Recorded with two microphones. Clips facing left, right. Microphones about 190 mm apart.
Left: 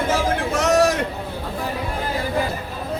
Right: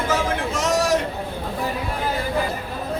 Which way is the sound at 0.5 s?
65° left (ahead or behind).